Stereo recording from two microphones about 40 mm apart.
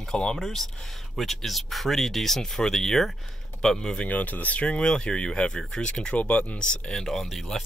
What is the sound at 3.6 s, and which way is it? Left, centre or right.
Speech, centre.